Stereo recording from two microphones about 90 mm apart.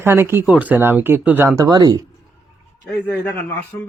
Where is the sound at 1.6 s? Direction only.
45° right (ahead or behind).